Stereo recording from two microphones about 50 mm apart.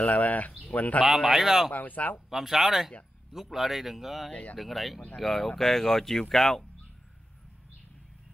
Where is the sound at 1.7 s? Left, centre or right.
Left.